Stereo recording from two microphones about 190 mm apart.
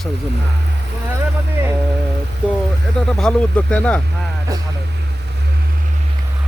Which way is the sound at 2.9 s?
5° left (ahead or behind).